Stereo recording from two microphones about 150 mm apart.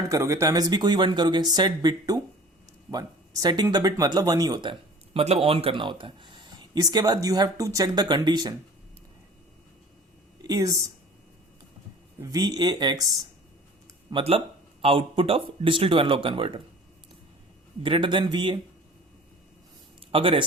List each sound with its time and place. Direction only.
0.1 s speech: 20° right (ahead or behind)
10.4 s speech: 25° right (ahead or behind)
12.2 s speech: 25° right (ahead or behind)
17.8 s speech: 35° right (ahead or behind)
20.1 s speech: 40° right (ahead or behind)